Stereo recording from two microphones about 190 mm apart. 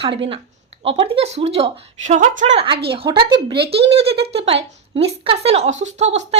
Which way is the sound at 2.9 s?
25° right (ahead or behind).